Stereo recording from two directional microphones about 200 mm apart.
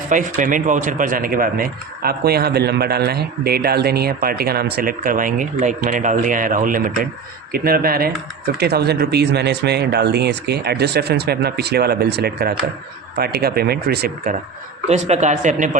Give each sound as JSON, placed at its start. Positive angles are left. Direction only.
{"t": 0.1, "sound": "speech", "side_deg": -40}
{"t": 14.8, "sound": "speech", "side_deg": -35}